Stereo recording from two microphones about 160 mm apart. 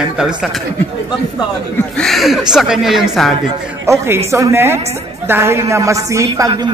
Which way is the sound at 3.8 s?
15° right (ahead or behind).